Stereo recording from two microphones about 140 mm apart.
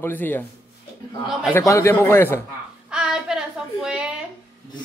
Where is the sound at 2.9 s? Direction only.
5° right (ahead or behind).